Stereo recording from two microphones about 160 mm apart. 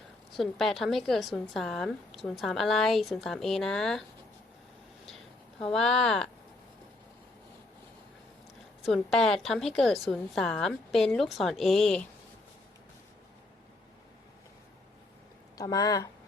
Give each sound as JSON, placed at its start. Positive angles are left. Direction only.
{"t": 0.3, "sound": "a woman's voice", "side_deg": 0}
{"t": 5.0, "sound": "a sound", "side_deg": 5}
{"t": 8.8, "sound": "a woman's voice", "side_deg": 0}
{"t": 15.5, "sound": "speech", "side_deg": 20}